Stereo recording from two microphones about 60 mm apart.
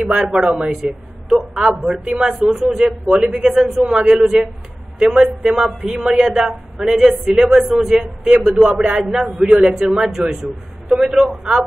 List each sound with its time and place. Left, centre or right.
0.1 s a man's voice: centre
0.7 s a man's voice: centre
2.4 s a man's voice: centre
3.9 s a man's voice: centre
4.9 s speech: centre
5.4 s a man's voice: centre
9.2 s a man's voice: centre